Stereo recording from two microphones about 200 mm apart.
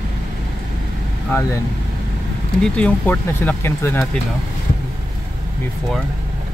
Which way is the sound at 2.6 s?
5° left (ahead or behind).